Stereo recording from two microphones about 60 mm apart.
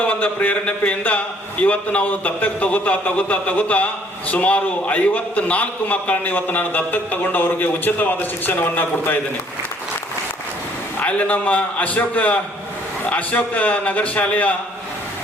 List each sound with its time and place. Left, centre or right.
0.0 s a man's voice: left
11.0 s a man's voice: left